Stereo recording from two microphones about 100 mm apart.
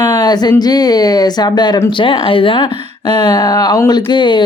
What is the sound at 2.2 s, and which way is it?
Speech, 60° left (ahead or behind).